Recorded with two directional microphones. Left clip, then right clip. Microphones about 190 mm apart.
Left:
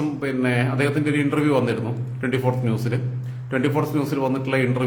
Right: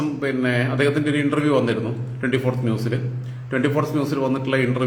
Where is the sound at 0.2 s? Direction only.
20° left (ahead or behind).